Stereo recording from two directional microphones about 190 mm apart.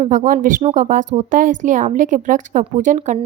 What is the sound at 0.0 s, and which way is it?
A woman's voice, 40° right (ahead or behind).